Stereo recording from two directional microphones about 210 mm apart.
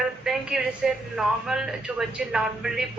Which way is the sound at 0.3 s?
Centre (ahead or behind).